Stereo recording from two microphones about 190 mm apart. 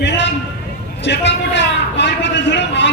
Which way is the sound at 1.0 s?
65° left (ahead or behind).